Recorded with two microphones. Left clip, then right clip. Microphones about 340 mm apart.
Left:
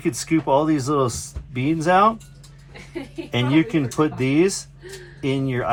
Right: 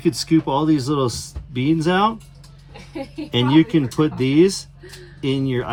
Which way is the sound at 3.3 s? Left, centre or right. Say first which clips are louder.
Right 3 dB; centre.